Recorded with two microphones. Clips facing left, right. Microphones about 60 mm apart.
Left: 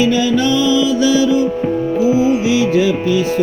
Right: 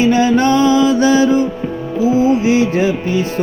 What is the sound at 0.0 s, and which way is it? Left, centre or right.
Music, right.